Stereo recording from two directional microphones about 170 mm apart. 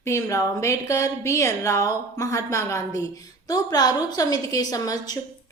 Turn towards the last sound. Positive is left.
turn(degrees=20)  # may be behind; listen again after turning